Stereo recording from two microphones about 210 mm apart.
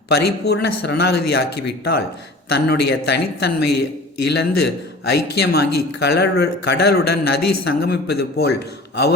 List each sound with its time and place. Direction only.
0.1 s a man's voice: 50° left (ahead or behind)